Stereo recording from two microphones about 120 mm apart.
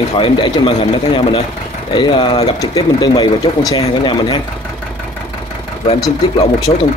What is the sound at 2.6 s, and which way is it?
Speech, 35° left (ahead or behind).